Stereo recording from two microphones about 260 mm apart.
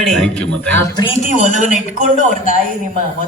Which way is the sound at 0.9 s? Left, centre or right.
Left.